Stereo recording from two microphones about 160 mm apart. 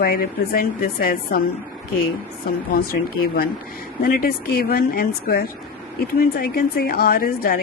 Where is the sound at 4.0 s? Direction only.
65° left (ahead or behind).